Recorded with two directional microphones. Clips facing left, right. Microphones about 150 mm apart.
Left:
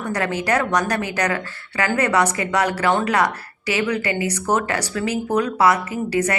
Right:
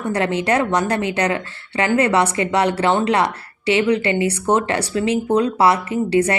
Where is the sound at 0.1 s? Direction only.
25° right (ahead or behind).